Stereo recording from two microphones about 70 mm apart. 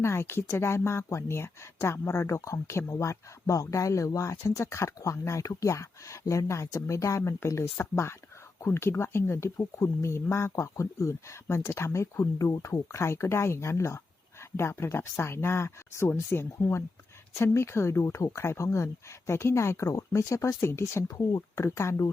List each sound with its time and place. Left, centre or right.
0.0 s speech: left
21.1 s speech: left